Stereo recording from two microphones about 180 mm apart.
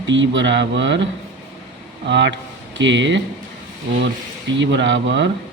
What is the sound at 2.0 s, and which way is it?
Speech, 80° right.